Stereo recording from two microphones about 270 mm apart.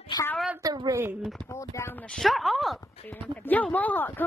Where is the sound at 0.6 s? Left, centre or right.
Centre.